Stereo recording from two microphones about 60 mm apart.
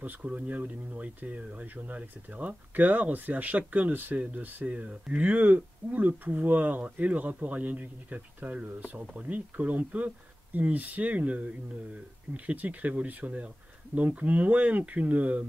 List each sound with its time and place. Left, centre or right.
0.0 s speech: right